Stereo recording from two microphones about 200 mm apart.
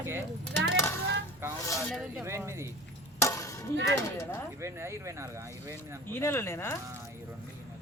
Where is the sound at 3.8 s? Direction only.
15° left (ahead or behind).